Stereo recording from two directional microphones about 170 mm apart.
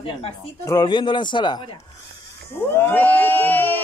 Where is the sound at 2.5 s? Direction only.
15° left (ahead or behind).